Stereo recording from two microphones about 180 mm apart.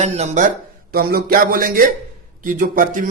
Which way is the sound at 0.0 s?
40° right (ahead or behind).